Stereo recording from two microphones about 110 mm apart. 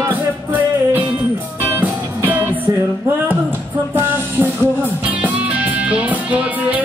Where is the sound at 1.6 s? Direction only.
15° right (ahead or behind).